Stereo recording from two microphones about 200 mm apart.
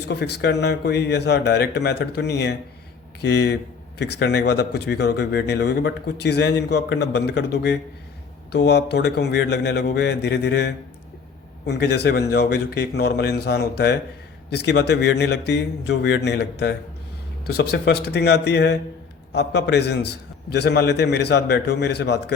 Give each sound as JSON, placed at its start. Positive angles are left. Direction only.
{"t": 0.1, "sound": "a man's voice", "side_deg": 55}